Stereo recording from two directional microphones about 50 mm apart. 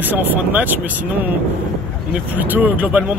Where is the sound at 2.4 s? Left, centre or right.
Right.